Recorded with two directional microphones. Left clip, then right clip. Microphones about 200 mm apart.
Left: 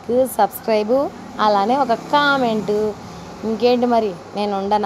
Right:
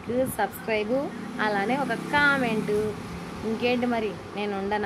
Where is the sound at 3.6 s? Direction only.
30° left (ahead or behind).